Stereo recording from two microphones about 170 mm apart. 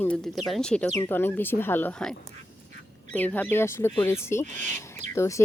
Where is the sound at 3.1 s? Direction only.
10° left (ahead or behind).